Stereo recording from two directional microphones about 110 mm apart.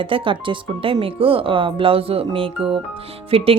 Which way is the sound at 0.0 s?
50° right (ahead or behind).